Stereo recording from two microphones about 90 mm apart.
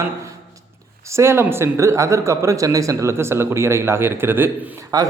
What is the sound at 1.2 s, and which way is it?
Speech, 30° right (ahead or behind).